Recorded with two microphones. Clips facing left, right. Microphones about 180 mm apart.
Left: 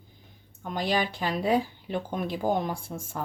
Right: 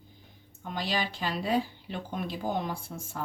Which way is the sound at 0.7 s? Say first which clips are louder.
Left 5 dB; 50° left (ahead or behind).